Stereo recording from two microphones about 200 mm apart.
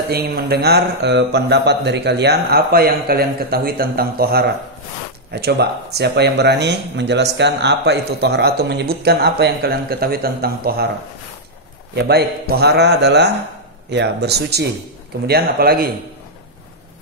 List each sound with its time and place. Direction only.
0.1 s speech: 50° right (ahead or behind)
11.9 s speech: 55° right (ahead or behind)